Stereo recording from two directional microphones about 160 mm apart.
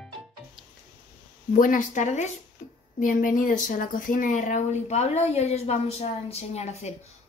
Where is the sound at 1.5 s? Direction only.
55° left (ahead or behind).